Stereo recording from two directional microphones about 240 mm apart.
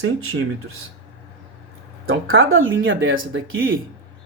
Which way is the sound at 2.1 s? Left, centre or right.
Right.